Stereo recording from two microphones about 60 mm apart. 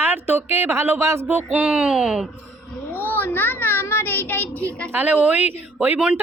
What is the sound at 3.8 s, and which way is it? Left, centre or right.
Child singing, left.